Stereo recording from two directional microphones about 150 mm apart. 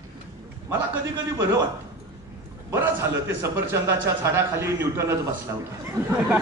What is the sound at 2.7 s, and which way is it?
A man's voice, 15° right (ahead or behind).